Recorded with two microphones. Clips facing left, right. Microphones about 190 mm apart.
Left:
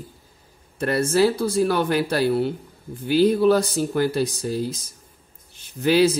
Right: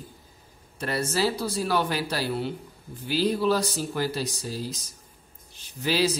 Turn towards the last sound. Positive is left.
turn(degrees=55)  # may be behind; listen again after turning